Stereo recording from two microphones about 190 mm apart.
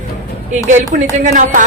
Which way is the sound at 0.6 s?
40° right (ahead or behind).